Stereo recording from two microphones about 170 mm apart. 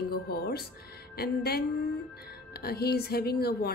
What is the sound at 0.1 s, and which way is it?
A woman's voice, 65° left (ahead or behind).